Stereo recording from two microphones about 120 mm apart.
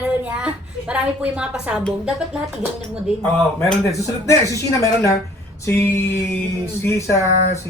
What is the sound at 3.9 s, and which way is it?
Speech, 25° left (ahead or behind).